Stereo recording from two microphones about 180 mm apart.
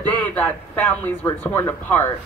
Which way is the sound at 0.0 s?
10° left (ahead or behind).